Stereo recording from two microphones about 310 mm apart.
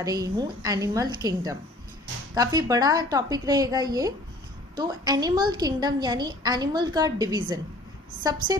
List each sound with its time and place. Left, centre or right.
0.0 s a woman's voice: centre